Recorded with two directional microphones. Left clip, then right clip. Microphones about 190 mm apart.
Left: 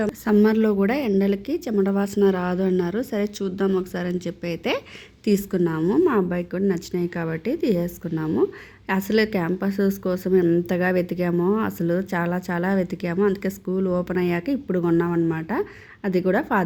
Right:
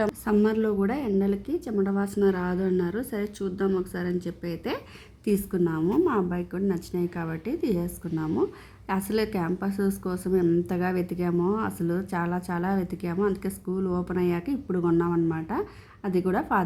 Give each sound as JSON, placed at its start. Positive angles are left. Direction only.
{"t": 0.3, "sound": "a woman's voice", "side_deg": 20}